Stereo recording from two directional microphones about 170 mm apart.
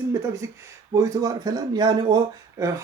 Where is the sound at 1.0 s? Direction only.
20° right (ahead or behind).